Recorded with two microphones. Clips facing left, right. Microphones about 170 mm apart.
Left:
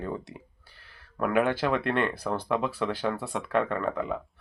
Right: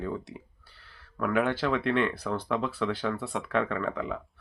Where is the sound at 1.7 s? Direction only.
50° left (ahead or behind).